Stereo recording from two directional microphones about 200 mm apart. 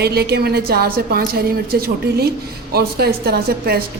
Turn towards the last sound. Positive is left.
turn(degrees=-50)  # may be behind; listen again after turning